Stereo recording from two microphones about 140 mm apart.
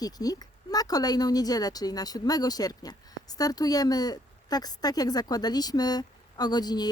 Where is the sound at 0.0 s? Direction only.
25° left (ahead or behind).